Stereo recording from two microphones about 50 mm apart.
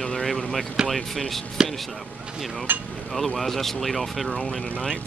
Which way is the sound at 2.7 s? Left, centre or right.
Right.